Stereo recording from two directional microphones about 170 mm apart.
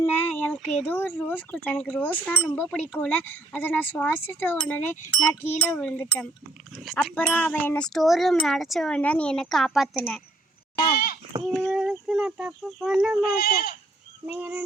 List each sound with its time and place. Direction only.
0.0 s speech: 10° left (ahead or behind)
10.9 s speech: 60° left (ahead or behind)
11.4 s speech: 5° left (ahead or behind)
13.2 s speech: 65° left (ahead or behind)
14.3 s fowl: 10° right (ahead or behind)